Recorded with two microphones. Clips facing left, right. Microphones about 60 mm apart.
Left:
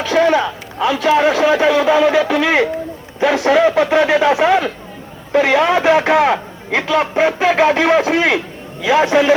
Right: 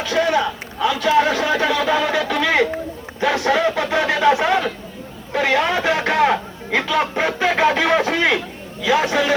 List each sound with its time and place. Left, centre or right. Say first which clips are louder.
0.1 s a sound: left 5 dB; left
0.9 s speech: left 3 dB; left
8.8 s speech: left 5 dB; left